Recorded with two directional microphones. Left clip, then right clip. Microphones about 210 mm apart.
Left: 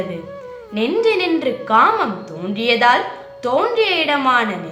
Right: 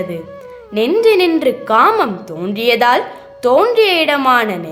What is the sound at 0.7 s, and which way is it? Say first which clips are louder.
A woman's voice: right 5 dB; 55° right (ahead or behind).